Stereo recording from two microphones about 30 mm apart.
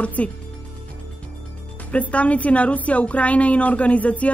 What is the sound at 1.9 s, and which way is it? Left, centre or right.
Speech, left.